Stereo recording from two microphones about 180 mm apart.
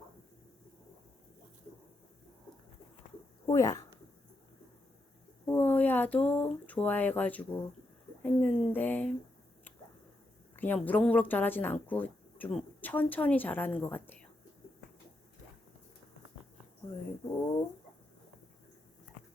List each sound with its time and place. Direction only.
3.4 s speech: 20° left (ahead or behind)
5.5 s a sound: 10° left (ahead or behind)
8.2 s speech: 5° left (ahead or behind)
10.6 s speech: 10° left (ahead or behind)